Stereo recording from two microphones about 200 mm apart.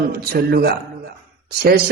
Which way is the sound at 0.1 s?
50° right (ahead or behind).